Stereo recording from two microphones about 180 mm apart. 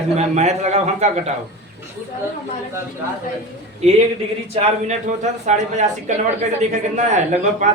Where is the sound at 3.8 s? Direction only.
40° right (ahead or behind).